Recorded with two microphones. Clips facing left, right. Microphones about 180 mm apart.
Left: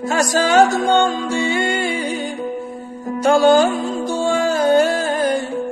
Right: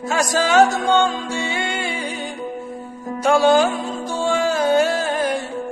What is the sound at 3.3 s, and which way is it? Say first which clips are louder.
Music: left 2 dB; centre (ahead or behind).